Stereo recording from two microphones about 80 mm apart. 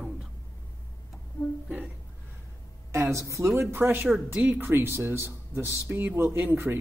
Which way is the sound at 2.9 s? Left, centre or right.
Right.